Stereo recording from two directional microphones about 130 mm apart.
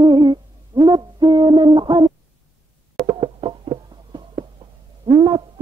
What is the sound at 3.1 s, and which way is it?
Music, 40° right (ahead or behind).